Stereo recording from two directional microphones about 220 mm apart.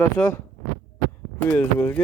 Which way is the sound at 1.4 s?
5° left (ahead or behind).